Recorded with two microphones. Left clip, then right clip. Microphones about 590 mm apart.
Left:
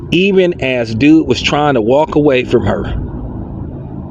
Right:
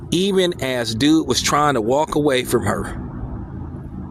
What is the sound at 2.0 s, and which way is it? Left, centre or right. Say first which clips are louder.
Speech: left 7 dB; right.